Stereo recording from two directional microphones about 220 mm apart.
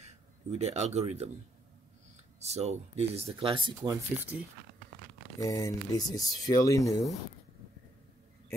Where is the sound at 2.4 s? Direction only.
30° right (ahead or behind).